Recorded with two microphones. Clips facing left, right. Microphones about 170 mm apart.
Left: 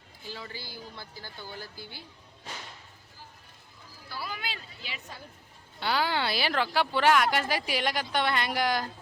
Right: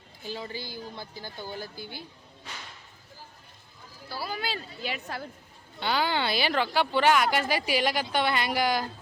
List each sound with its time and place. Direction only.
0.3 s speech: 15° right (ahead or behind)
4.1 s speech: 35° right (ahead or behind); by 5.3 s 75° right (ahead or behind)
5.8 s speech: centre (ahead or behind)